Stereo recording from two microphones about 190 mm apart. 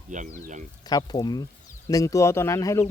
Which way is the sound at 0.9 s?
20° left (ahead or behind).